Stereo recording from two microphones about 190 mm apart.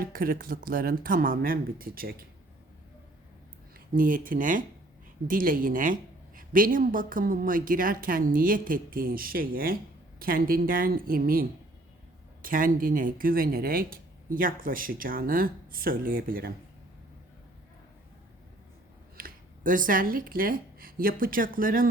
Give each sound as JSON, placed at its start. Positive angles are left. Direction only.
{"t": 0.0, "sound": "a woman's voice", "side_deg": -50}
{"t": 3.9, "sound": "a woman's voice", "side_deg": -45}
{"t": 19.1, "sound": "speech", "side_deg": -45}